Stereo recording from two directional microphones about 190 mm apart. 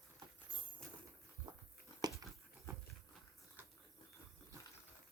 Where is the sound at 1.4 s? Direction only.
25° right (ahead or behind).